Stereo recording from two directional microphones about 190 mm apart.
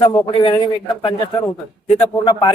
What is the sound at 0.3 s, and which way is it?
Speech, 30° left (ahead or behind).